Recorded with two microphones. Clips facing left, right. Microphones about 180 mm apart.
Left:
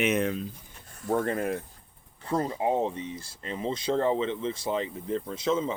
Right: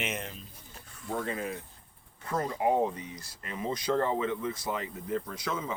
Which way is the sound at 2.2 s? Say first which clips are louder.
Left 2 dB; 30° left (ahead or behind).